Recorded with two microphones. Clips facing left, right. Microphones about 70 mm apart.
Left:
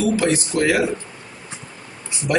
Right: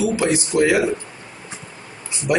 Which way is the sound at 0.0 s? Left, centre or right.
Centre.